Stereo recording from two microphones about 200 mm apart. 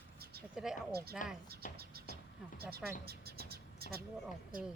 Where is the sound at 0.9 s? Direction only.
50° right (ahead or behind).